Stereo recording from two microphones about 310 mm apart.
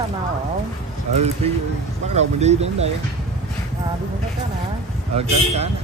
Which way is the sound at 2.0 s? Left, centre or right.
Right.